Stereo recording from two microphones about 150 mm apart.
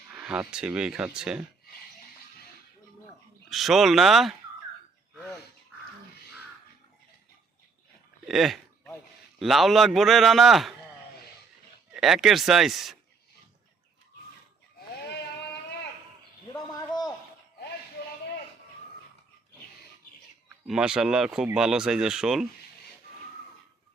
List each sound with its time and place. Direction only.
0.1 s speech: 5° right (ahead or behind)
3.5 s speech: centre (ahead or behind)
8.3 s a sound: centre (ahead or behind)
9.4 s speech: centre (ahead or behind)
11.9 s speech: centre (ahead or behind)
16.5 s bird: 25° left (ahead or behind)
20.7 s speech: 5° right (ahead or behind)